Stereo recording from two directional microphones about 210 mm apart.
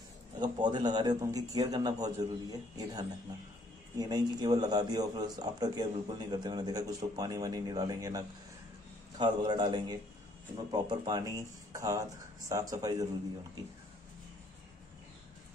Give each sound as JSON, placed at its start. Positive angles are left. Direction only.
{"t": 0.4, "sound": "a man's voice", "side_deg": -20}
{"t": 9.2, "sound": "a man's voice", "side_deg": -20}